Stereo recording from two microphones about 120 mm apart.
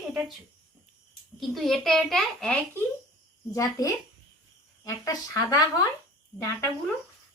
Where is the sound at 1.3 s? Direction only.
Centre (ahead or behind).